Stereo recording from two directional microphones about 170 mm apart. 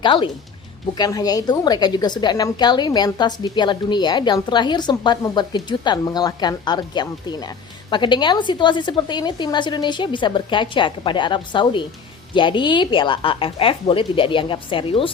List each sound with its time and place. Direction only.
0.0 s a woman's voice: 30° left (ahead or behind)